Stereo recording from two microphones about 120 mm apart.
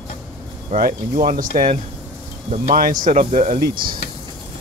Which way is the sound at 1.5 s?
90° right.